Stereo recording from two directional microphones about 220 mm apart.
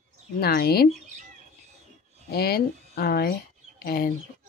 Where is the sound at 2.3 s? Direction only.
45° left (ahead or behind).